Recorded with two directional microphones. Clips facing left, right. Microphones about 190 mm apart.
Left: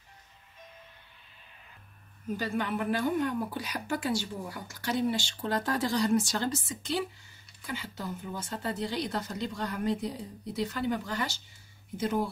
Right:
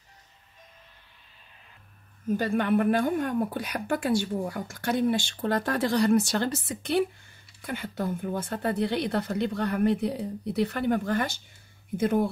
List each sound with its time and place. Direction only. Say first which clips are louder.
2.3 s a woman's voice: right 7 dB; 55° right (ahead or behind)